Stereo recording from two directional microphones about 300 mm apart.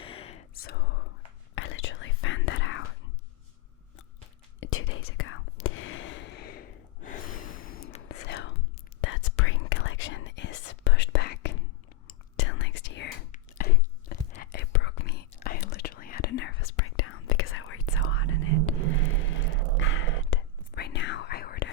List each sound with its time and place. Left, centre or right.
0.0 s whispering: centre; by 2.8 s left
4.6 s whispering: left
13.3 s chewing: left
14.3 s whispering: left
16.7 s whispering: left
19.8 s whispering: left